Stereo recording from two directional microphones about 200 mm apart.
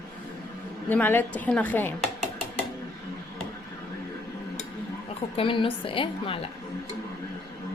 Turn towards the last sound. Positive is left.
turn(degrees=25)  # may be behind; listen again after turning